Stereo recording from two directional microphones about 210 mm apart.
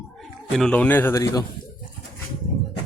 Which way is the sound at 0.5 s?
5° left (ahead or behind).